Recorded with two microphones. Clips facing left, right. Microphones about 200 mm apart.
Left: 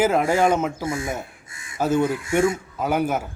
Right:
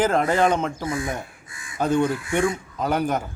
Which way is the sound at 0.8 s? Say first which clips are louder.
Even; 25° left (ahead or behind).